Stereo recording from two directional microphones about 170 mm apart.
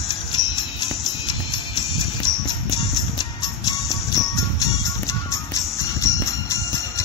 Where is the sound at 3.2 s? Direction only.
20° left (ahead or behind).